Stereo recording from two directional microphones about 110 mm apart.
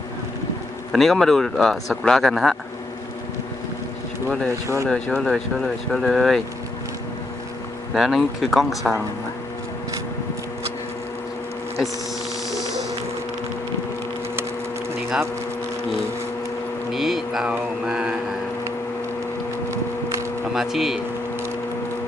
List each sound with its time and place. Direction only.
0.9 s speech: centre (ahead or behind)
4.4 s speech: 25° right (ahead or behind)
5.1 s speech: centre (ahead or behind)
7.9 s speech: 5° right (ahead or behind)
12.5 s a sound: 30° left (ahead or behind)
16.9 s a sound: centre (ahead or behind)
17.8 s mantra: 5° right (ahead or behind)
20.5 s speech: 5° right (ahead or behind)